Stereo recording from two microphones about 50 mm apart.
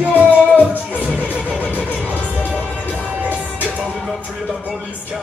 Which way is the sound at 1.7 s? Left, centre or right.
Left.